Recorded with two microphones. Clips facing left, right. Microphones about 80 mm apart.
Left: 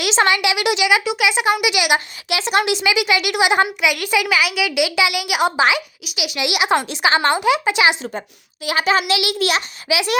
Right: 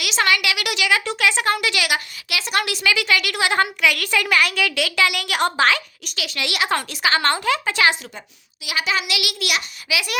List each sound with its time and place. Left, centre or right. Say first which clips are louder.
0.0 s speech: left 4 dB; left
8.6 s a child's voice: left 6 dB; left